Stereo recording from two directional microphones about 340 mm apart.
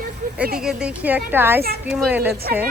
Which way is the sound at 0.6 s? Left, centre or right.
Centre.